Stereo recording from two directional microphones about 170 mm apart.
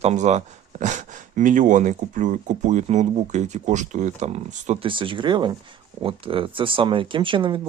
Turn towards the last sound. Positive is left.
turn(degrees=-30)  # may be behind; listen again after turning